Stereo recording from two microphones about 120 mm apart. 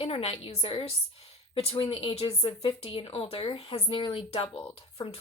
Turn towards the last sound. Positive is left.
turn(degrees=50)  # may be behind; listen again after turning